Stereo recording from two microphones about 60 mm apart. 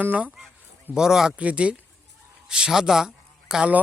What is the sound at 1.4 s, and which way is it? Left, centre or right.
Speech, right.